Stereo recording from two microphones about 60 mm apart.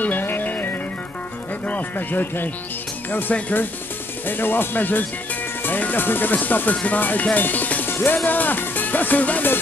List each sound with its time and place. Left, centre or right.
0.0 s music: left
1.7 s speech: left